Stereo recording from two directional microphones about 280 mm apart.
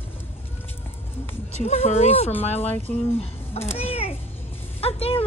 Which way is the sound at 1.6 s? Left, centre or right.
Left.